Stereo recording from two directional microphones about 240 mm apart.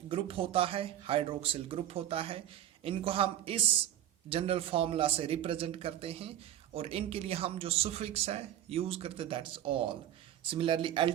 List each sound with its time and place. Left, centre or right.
0.1 s speech: right